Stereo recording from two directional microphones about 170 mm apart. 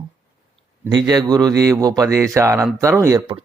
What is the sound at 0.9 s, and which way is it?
A man's voice, 25° right (ahead or behind).